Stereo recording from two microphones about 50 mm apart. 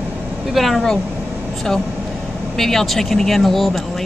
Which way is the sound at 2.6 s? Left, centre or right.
Centre.